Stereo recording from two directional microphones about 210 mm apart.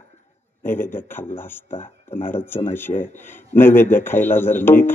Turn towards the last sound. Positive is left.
turn(degrees=10)  # may be behind; listen again after turning